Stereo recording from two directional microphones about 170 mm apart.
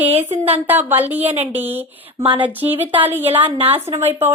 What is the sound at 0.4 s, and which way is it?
A woman's voice, 10° right (ahead or behind).